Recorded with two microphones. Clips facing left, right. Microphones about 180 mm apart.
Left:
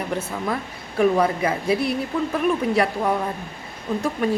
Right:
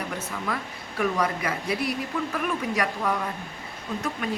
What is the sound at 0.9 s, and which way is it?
Speech, 30° left (ahead or behind).